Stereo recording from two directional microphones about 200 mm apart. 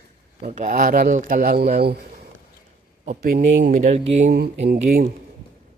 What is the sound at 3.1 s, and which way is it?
Speech, 40° right (ahead or behind).